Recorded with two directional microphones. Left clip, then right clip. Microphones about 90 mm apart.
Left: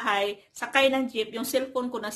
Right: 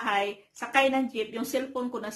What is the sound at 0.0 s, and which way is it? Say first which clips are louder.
A woman's voice: left 2 dB; 25° left (ahead or behind).